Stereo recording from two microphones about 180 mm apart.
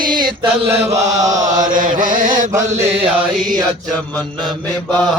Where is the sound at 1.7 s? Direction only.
50° right (ahead or behind).